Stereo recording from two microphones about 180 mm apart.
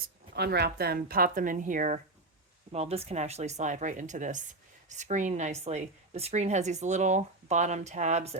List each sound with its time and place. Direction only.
0.0 s speech: 65° right (ahead or behind); by 2.0 s 45° right (ahead or behind)
2.7 s a woman's voice: 35° right (ahead or behind)